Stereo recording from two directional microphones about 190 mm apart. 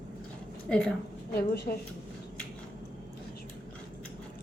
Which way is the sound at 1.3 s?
55° left (ahead or behind).